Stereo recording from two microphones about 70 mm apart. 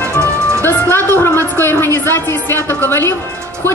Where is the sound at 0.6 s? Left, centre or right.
Left.